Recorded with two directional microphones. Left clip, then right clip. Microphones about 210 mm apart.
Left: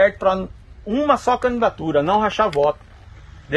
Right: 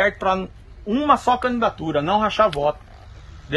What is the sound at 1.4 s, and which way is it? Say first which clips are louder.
Speech: left 2 dB; 15° left (ahead or behind).